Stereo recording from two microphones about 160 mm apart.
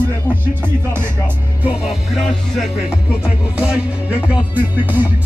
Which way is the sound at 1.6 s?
5° right (ahead or behind).